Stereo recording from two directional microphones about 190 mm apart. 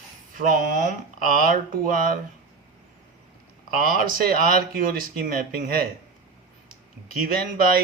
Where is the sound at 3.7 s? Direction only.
45° right (ahead or behind).